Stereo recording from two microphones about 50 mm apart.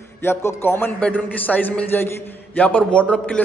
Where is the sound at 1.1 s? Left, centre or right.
Left.